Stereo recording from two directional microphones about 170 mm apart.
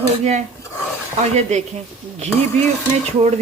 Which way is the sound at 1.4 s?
45° right (ahead or behind).